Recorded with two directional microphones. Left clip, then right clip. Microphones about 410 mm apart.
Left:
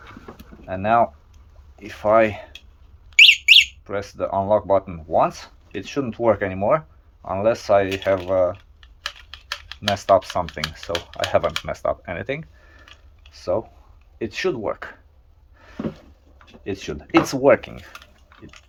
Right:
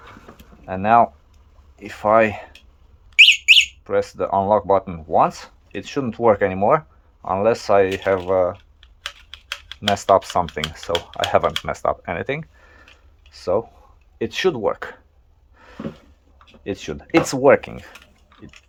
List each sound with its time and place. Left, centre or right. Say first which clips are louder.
0.6 s speech: right 3 dB; centre
3.1 s bird: even; centre
3.8 s speech: right 5 dB; centre
9.9 s speech: right 1 dB; centre
15.5 s a sound: right 2 dB; centre
16.6 s speech: right 1 dB; centre